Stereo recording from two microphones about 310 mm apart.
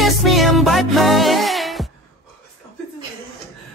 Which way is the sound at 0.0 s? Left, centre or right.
Centre.